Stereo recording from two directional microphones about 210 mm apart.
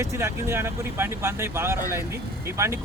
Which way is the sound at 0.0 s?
15° right (ahead or behind).